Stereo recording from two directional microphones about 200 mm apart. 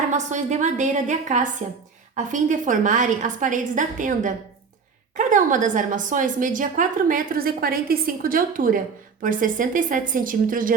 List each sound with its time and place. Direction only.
0.1 s a woman's voice: 35° right (ahead or behind)